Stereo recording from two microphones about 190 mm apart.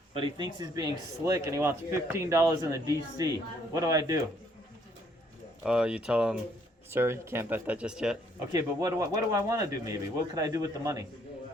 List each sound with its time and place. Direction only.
0.1 s speech: 25° right (ahead or behind)
5.6 s speech: 5° right (ahead or behind)
8.5 s speech: 20° right (ahead or behind)